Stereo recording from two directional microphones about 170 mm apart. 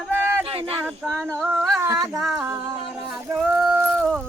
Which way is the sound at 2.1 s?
Centre (ahead or behind).